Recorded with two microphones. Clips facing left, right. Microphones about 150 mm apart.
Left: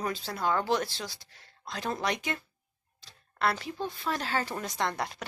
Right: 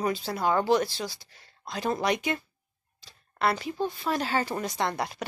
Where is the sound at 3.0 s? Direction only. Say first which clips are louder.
Right 2 dB; 5° right (ahead or behind).